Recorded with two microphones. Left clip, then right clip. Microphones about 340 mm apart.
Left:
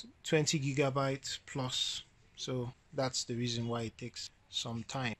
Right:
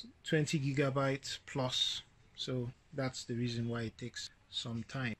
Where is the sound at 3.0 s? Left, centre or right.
Centre.